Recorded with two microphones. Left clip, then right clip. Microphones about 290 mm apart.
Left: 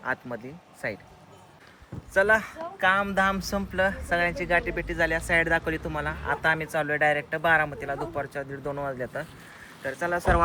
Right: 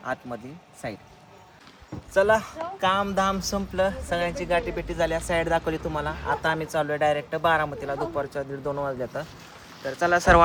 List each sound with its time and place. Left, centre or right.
0.0 s speech: centre
2.1 s speech: centre
10.2 s speech: right